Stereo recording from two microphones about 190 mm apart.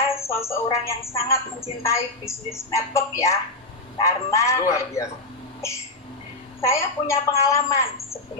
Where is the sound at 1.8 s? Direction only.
15° left (ahead or behind).